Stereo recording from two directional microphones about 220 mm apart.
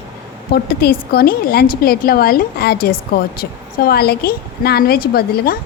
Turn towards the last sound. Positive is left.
turn(degrees=45)  # may be behind; listen again after turning